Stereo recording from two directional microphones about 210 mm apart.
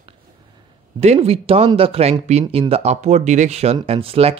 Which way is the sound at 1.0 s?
30° right (ahead or behind).